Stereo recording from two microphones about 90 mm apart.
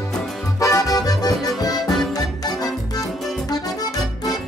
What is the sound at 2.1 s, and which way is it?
Music, 45° left (ahead or behind).